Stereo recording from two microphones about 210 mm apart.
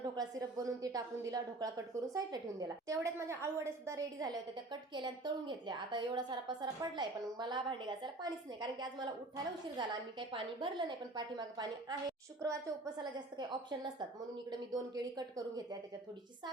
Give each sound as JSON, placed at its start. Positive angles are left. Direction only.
{"t": 0.2, "sound": "a woman's voice", "side_deg": -15}